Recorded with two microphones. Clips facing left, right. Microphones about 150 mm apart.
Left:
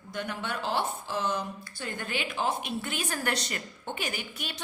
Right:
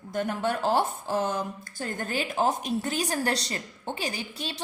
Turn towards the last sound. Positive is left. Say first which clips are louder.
# right 3 dB
turn(degrees=-30)  # may be behind; listen again after turning